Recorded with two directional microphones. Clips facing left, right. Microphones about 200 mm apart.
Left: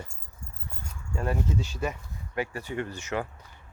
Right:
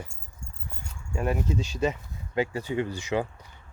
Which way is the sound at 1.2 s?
15° right (ahead or behind).